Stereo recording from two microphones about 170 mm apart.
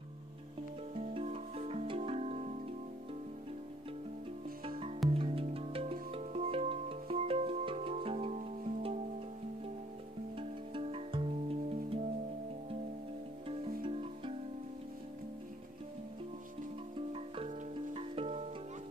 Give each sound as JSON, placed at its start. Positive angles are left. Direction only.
{"t": 0.9, "sound": "music", "side_deg": -35}
{"t": 4.6, "sound": "music", "side_deg": -30}
{"t": 8.4, "sound": "music", "side_deg": -50}
{"t": 10.3, "sound": "music", "side_deg": -35}
{"t": 13.8, "sound": "music", "side_deg": -30}
{"t": 16.9, "sound": "music", "side_deg": -35}